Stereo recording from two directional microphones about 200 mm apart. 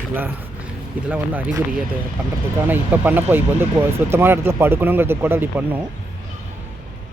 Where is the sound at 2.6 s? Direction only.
10° right (ahead or behind).